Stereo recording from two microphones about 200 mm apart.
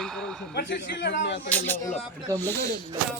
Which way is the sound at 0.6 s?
60° left (ahead or behind).